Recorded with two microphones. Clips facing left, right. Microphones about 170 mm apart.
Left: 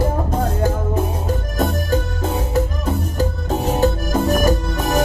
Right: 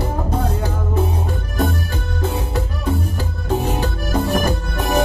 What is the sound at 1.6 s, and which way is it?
Music, 45° left (ahead or behind).